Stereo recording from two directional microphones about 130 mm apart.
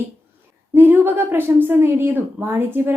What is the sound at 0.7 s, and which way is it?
A woman's voice, 15° right (ahead or behind).